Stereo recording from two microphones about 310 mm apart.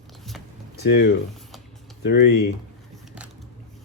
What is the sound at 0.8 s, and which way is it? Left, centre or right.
Speech, left.